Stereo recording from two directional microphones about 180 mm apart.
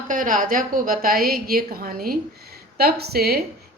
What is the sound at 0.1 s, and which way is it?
A woman's voice, 50° right (ahead or behind).